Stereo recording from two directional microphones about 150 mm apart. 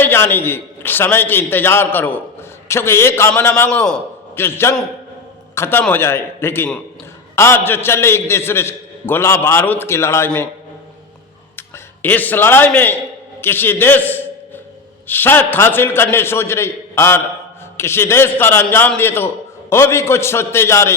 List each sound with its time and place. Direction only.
0.0 s a man's voice: 15° left (ahead or behind)
12.0 s a man's voice: 10° left (ahead or behind)